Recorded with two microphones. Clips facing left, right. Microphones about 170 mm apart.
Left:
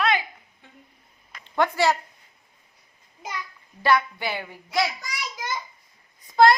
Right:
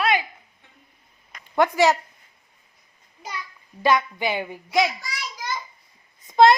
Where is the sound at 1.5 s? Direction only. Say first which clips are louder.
Right 3 dB; 15° right (ahead or behind).